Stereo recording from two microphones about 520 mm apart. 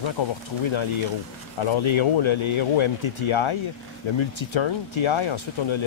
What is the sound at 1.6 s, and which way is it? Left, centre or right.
Speech, left.